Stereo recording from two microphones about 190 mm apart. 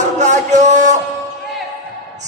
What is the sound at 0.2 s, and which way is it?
Music, 40° right (ahead or behind).